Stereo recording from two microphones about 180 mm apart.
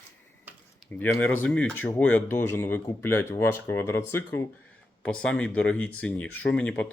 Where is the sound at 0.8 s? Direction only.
10° left (ahead or behind).